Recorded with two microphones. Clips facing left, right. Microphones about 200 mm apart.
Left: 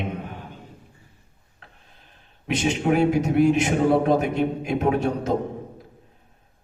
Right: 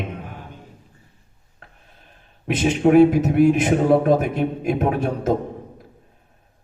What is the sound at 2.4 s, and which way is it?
A man's voice, 50° right (ahead or behind).